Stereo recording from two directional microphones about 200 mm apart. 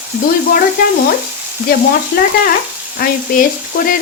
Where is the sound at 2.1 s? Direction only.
50° left (ahead or behind).